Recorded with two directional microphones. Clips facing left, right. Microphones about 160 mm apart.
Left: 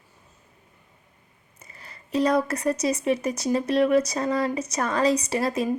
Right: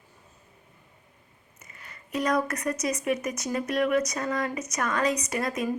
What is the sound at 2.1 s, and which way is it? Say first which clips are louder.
Speech: left 4 dB; 30° left (ahead or behind).